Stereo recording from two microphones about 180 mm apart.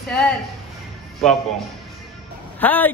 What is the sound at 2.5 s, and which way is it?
Speech, 10° left (ahead or behind).